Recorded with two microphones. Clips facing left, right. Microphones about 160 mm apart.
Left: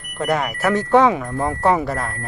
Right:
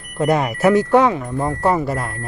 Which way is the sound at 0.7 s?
5° right (ahead or behind).